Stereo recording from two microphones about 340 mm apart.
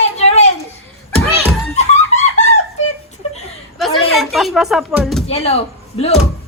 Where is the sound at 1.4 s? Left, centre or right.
Centre.